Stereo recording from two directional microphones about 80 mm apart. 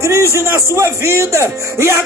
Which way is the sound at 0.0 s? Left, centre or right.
Right.